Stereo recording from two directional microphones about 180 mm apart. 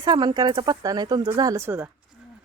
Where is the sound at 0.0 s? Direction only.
25° right (ahead or behind).